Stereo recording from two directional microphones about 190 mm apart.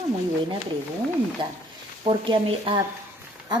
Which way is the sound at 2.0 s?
25° right (ahead or behind).